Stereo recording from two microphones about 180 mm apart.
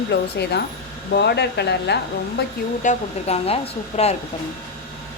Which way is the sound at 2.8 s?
40° left (ahead or behind).